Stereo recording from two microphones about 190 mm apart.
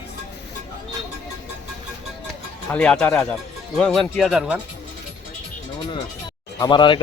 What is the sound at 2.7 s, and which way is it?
Speech, 5° left (ahead or behind).